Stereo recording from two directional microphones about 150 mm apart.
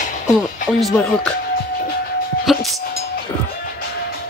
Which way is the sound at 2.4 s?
Centre (ahead or behind).